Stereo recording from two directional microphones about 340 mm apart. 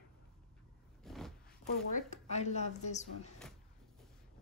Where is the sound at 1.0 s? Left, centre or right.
Centre.